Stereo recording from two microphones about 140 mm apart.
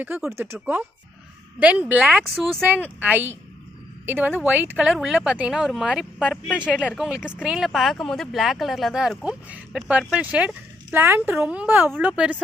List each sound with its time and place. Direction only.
0.0 s a woman's voice: 15° right (ahead or behind)
2.6 s a woman's voice: 10° right (ahead or behind)
4.9 s speech: centre (ahead or behind)
6.6 s a woman's voice: 10° right (ahead or behind)